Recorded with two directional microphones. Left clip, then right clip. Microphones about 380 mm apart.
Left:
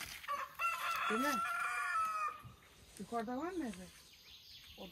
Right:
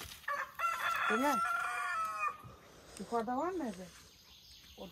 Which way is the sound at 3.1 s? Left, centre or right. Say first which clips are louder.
Right 6 dB; centre.